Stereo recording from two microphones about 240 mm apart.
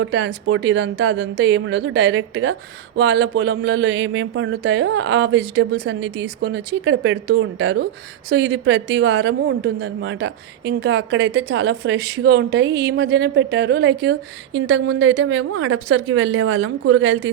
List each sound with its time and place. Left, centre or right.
0.0 s a woman's voice: right